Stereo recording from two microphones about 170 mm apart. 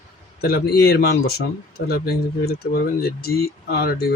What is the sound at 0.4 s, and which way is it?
Speech, 65° left (ahead or behind).